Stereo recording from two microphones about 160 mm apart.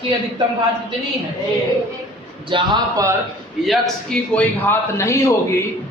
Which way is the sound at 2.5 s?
30° right (ahead or behind).